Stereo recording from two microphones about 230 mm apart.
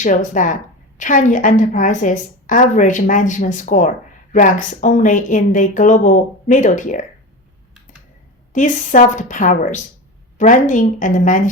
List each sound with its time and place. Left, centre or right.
0.0 s a woman's voice: left
8.5 s a woman's voice: left